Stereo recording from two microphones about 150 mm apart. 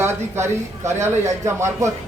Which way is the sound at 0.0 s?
15° right (ahead or behind).